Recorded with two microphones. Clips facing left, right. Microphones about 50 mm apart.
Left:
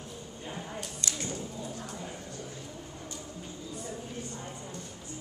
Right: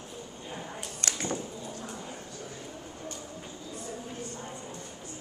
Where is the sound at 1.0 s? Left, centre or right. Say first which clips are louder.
Right 5 dB; right.